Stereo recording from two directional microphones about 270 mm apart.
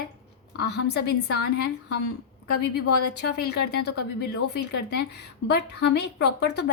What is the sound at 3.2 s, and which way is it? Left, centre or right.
A woman's voice, left.